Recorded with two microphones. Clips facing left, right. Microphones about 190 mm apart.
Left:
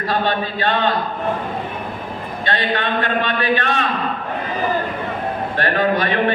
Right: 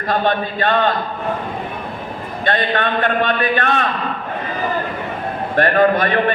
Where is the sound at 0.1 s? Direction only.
50° right (ahead or behind).